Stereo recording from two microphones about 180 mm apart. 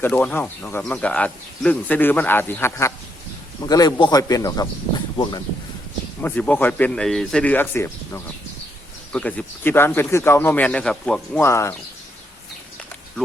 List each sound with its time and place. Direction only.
0.0 s speech: 10° left (ahead or behind); by 5.4 s 25° left (ahead or behind)
6.2 s speech: 10° left (ahead or behind)